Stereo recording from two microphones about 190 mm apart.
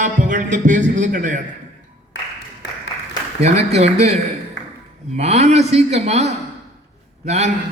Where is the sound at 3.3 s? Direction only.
35° right (ahead or behind).